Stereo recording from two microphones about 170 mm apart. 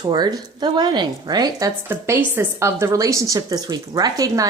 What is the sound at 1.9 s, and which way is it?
A woman's voice, 10° right (ahead or behind).